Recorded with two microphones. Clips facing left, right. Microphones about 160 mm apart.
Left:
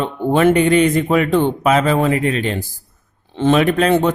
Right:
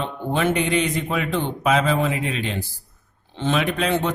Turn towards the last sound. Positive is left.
turn(degrees=50)  # may be behind; listen again after turning